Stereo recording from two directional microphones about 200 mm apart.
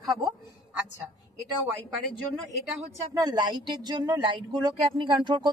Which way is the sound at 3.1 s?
20° right (ahead or behind).